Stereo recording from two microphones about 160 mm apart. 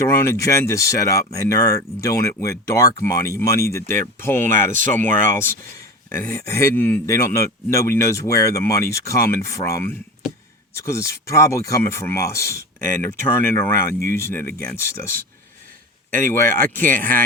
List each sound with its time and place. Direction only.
0.1 s speech: 15° left (ahead or behind)
16.1 s speech: 15° left (ahead or behind)
16.5 s speech: 60° right (ahead or behind)
16.8 s speech: 10° left (ahead or behind)